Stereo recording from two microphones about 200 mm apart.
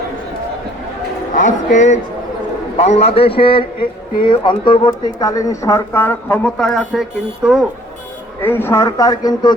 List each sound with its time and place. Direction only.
1.3 s a man's voice: 40° left (ahead or behind); by 7.6 s centre (ahead or behind)
8.4 s speech: 10° left (ahead or behind)